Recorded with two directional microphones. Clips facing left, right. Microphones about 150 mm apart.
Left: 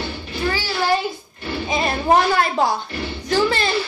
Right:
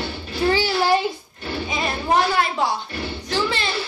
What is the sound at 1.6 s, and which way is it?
Speech, 45° left (ahead or behind).